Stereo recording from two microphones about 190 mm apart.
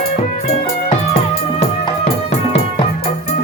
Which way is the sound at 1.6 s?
30° left (ahead or behind).